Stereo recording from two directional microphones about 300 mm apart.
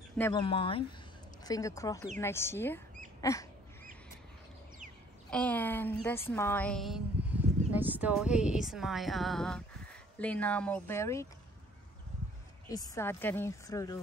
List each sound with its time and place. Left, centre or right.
0.2 s a woman's voice: centre
3.2 s a sound: centre
5.3 s a woman's voice: centre
12.6 s a woman's voice: centre